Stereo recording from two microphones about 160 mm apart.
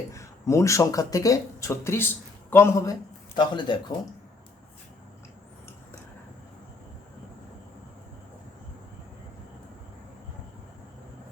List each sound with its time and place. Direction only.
0.1 s speech: 20° left (ahead or behind)